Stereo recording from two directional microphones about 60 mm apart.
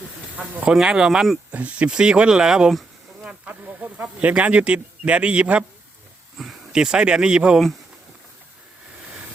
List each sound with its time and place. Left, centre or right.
0.7 s speech: centre
1.5 s speech: right
3.2 s speech: right
6.3 s a sound: centre
6.7 s speech: centre